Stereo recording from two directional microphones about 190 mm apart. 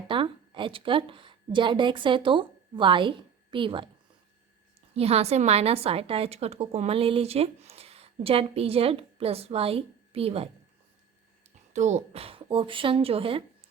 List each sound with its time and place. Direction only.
0.1 s a woman's voice: 25° right (ahead or behind)
4.9 s a woman's voice: 30° right (ahead or behind)
11.5 s a woman's voice: 40° right (ahead or behind)